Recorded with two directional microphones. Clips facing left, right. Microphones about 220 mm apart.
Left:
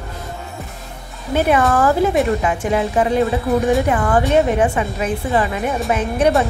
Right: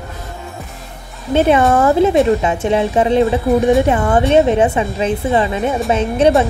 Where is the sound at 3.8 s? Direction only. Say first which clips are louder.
Right 3 dB; 25° right (ahead or behind).